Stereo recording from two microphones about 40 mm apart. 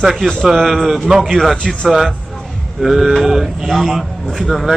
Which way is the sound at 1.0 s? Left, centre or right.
Centre.